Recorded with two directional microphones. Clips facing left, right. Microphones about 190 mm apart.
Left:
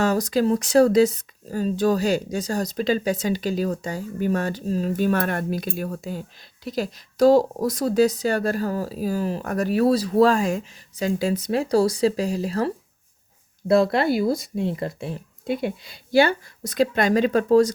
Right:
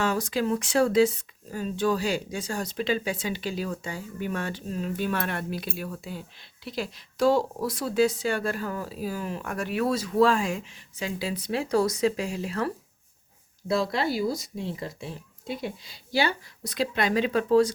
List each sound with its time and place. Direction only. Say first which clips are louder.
0.0 s speech: left 6 dB; 40° left (ahead or behind)
13.7 s speech: left 8 dB; 55° left (ahead or behind)